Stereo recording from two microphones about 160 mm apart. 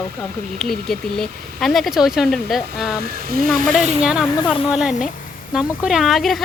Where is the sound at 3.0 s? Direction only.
70° right (ahead or behind).